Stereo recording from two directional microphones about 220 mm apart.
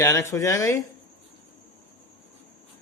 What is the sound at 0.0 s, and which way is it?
Speech, 10° left (ahead or behind).